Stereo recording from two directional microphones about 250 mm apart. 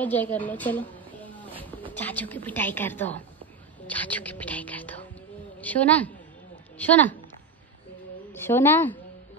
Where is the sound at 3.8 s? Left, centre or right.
Centre.